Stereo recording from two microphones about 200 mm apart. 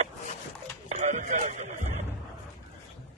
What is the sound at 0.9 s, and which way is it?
Radio, 35° right (ahead or behind).